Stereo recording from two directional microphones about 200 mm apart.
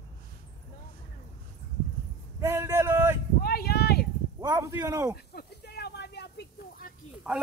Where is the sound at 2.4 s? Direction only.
15° right (ahead or behind).